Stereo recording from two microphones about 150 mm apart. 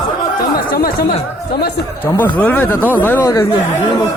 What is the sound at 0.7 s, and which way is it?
Speech, 85° left.